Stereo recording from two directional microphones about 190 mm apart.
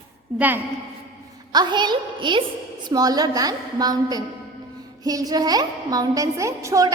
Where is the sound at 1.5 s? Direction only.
25° right (ahead or behind).